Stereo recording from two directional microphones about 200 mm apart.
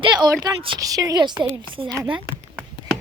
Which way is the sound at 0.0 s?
20° right (ahead or behind).